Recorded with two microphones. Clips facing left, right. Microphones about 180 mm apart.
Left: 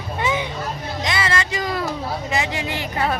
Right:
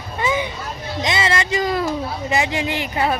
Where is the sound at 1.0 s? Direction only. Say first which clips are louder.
Right 3 dB; 25° right (ahead or behind).